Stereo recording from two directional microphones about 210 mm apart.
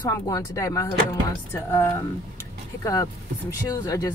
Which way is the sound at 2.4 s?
15° left (ahead or behind).